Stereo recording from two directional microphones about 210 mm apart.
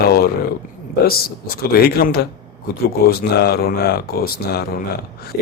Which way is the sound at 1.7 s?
45° left (ahead or behind).